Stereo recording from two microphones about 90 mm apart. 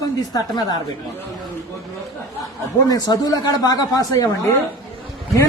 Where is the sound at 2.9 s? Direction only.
45° left (ahead or behind).